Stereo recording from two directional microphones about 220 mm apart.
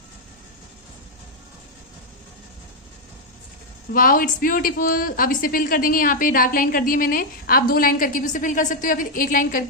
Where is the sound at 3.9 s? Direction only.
40° left (ahead or behind).